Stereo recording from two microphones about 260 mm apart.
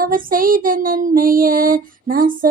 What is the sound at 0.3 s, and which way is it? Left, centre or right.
Child singing, right.